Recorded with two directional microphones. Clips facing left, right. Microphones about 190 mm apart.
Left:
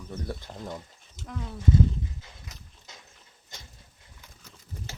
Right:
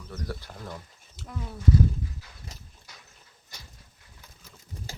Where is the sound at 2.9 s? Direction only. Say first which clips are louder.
Left 3 dB; 20° left (ahead or behind).